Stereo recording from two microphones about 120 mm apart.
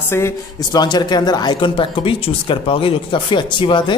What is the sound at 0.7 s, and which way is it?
Speech, 35° left (ahead or behind).